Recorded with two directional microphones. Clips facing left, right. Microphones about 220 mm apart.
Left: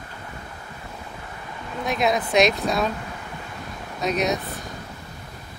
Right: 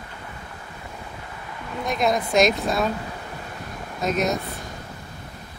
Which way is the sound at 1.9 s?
Centre (ahead or behind).